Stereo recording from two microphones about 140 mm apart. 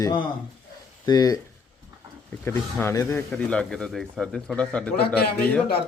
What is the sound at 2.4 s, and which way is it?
Speech, 20° left (ahead or behind).